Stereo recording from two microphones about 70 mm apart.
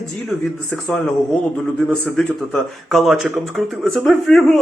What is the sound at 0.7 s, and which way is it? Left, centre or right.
Speech, centre.